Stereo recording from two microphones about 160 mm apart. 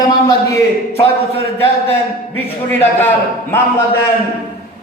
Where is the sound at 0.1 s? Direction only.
20° left (ahead or behind).